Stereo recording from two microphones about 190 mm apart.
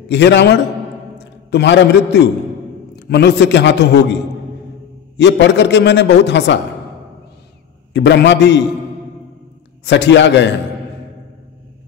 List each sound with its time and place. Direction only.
0.1 s a man's voice: 65° left (ahead or behind)
7.9 s a man's voice: 65° left (ahead or behind)
9.8 s a man's voice: 70° left (ahead or behind)